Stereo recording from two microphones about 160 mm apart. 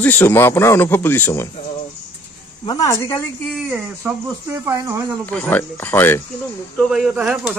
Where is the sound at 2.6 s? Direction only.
25° left (ahead or behind).